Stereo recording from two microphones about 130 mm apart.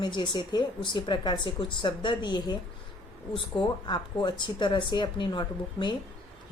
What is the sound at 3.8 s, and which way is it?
A woman's voice, 35° left (ahead or behind).